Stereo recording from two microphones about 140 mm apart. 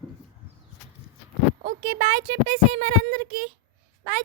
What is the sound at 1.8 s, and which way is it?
Speech, 40° right (ahead or behind).